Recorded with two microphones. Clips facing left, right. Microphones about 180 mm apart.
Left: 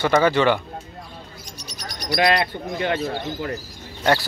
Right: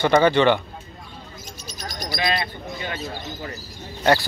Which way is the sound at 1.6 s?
65° left (ahead or behind).